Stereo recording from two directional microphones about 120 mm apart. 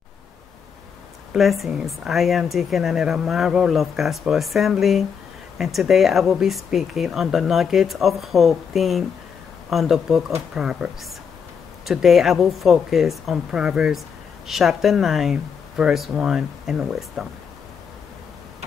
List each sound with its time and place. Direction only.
1.3 s a woman's voice: centre (ahead or behind)